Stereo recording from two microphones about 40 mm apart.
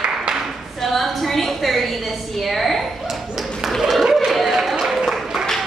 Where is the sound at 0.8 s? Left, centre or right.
Centre.